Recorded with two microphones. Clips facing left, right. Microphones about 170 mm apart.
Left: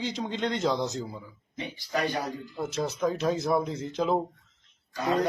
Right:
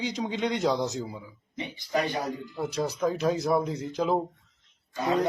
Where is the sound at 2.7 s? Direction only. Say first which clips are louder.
Even; centre (ahead or behind).